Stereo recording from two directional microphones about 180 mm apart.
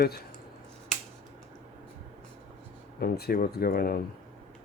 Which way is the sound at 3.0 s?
60° left (ahead or behind).